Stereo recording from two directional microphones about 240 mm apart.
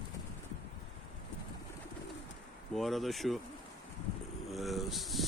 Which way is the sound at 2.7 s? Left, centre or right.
Centre.